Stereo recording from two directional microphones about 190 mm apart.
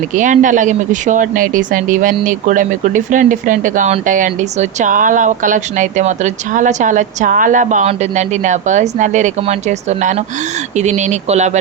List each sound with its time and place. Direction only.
0.2 s speech: 40° right (ahead or behind)